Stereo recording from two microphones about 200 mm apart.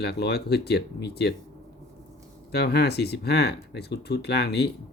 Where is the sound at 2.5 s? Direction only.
55° left (ahead or behind).